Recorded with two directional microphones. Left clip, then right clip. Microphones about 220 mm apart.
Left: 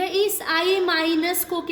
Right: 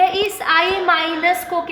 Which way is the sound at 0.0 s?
45° left (ahead or behind).